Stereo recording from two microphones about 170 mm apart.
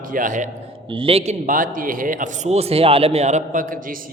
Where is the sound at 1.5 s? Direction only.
50° right (ahead or behind).